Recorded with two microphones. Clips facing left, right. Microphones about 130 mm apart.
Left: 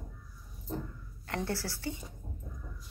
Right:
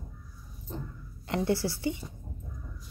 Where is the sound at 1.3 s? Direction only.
15° right (ahead or behind).